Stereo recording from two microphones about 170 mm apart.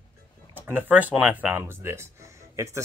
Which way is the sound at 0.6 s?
10° right (ahead or behind).